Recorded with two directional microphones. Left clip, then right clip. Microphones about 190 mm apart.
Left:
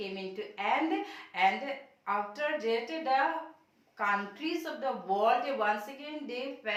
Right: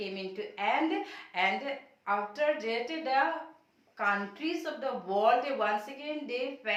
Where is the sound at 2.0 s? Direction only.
25° right (ahead or behind).